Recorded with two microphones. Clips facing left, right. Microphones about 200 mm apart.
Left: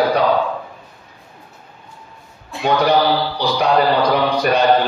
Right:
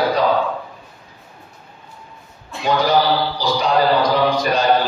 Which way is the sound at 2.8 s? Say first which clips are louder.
Left 1 dB; 65° left (ahead or behind).